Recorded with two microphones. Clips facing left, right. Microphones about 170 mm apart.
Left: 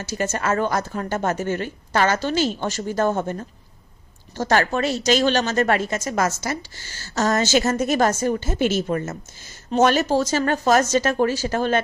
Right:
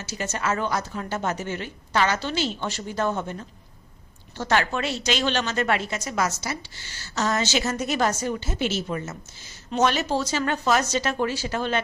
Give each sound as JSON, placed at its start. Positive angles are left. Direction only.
{"t": 0.1, "sound": "a woman's voice", "side_deg": 50}